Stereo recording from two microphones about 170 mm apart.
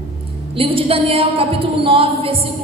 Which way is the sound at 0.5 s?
35° right (ahead or behind).